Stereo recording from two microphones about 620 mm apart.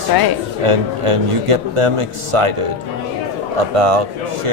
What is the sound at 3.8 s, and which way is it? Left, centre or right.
Speech, right.